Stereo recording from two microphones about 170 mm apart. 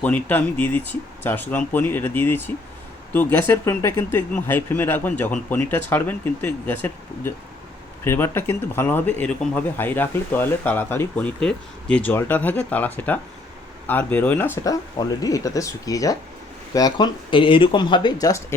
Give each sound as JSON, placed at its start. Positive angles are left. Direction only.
{"t": 0.0, "sound": "speech", "side_deg": 10}